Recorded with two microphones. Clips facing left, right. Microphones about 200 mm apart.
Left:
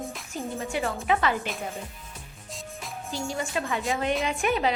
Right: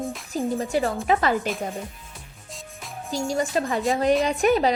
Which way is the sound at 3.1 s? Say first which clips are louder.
Right 6 dB; 40° right (ahead or behind).